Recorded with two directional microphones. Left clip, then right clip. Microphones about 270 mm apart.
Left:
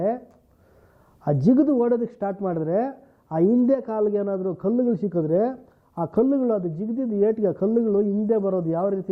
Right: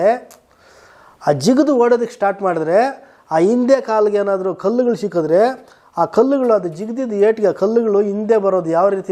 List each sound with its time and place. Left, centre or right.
0.0 s a man's voice: centre
1.3 s a man's voice: centre
4.9 s a man's voice: centre
5.1 s a man's voice: centre